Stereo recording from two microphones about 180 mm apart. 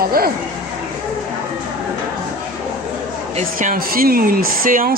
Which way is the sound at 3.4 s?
45° right (ahead or behind).